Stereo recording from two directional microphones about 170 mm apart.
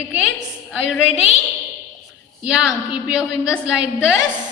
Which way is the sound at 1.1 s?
35° left (ahead or behind).